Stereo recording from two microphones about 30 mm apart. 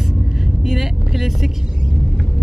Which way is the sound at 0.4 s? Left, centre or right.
Centre.